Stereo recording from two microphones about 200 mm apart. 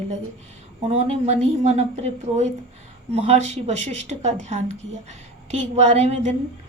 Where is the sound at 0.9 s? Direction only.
30° right (ahead or behind).